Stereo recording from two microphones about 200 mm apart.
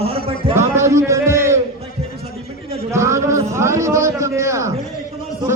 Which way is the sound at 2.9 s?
15° right (ahead or behind).